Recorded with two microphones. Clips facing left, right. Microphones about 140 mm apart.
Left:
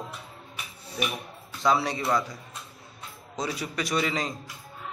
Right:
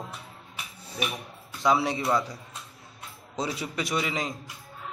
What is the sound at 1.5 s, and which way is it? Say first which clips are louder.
Speech: right 1 dB; 20° right (ahead or behind).